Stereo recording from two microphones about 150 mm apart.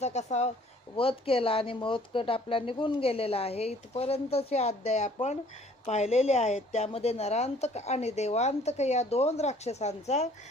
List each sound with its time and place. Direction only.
0.0 s speech: 50° left (ahead or behind)
0.9 s a woman's voice: 40° left (ahead or behind)